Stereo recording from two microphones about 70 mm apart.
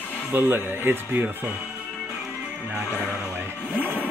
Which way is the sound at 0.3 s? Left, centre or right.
Right.